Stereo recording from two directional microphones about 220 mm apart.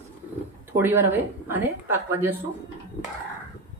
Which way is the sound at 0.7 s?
10° right (ahead or behind).